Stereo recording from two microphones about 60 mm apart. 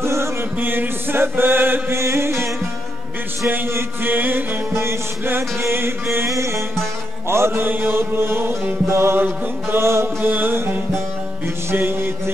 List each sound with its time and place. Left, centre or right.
0.0 s chant: right
2.0 s music: right
3.4 s mantra: right
6.2 s music: right
7.2 s mantra: right
10.3 s mantra: right
11.4 s music: right